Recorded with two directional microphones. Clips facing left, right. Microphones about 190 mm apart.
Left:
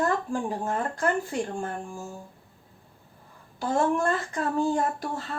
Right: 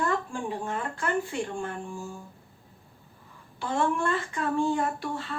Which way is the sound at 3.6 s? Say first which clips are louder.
Left 3 dB; 40° left (ahead or behind).